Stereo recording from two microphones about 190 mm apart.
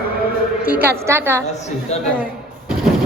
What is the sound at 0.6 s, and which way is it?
Speech, 10° right (ahead or behind).